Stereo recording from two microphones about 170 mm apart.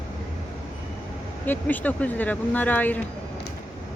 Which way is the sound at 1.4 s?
10° left (ahead or behind).